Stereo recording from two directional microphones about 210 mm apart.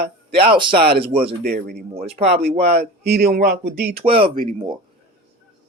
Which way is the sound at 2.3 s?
50° right (ahead or behind).